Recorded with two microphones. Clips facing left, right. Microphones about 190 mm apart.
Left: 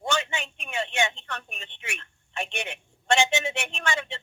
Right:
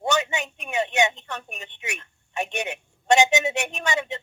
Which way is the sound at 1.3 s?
15° right (ahead or behind).